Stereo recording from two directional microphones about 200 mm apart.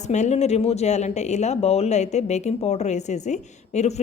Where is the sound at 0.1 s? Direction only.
35° left (ahead or behind).